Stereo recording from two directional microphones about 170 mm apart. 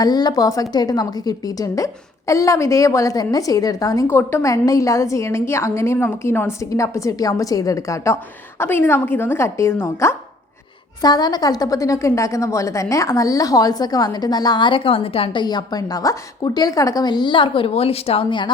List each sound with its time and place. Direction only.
0.0 s a woman's voice: 25° left (ahead or behind)